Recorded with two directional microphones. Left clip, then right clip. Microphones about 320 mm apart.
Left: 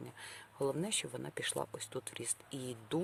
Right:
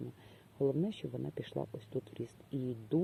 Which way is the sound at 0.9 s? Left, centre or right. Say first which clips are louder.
Left 2 dB; centre.